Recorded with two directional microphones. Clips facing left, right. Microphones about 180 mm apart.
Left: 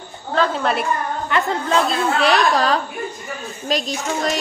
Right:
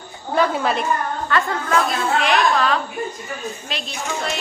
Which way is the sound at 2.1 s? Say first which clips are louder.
Left 1 dB; 35° left (ahead or behind).